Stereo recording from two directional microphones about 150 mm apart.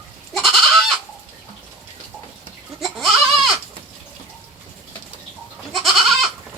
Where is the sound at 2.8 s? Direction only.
Centre (ahead or behind).